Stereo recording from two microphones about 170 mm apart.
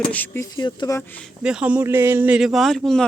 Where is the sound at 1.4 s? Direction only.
5° right (ahead or behind).